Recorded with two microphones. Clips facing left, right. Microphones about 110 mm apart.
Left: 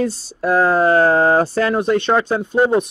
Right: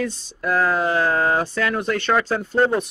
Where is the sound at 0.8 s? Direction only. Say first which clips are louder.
Left 7 dB; 40° left (ahead or behind); by 2.9 s 15° left (ahead or behind).